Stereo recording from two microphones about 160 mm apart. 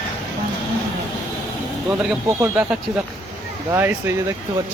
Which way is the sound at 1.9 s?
10° right (ahead or behind).